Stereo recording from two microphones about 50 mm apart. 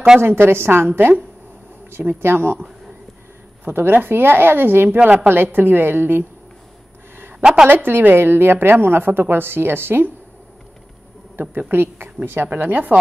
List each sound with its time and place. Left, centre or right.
0.2 s a woman's voice: right
3.7 s a woman's voice: right
4.8 s a woman's voice: right
5.3 s a woman's voice: right
7.3 s a woman's voice: centre
7.7 s a woman's voice: right
11.5 s a woman's voice: right